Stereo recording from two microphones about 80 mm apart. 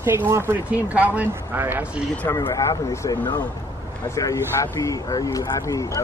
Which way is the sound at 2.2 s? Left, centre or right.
Left.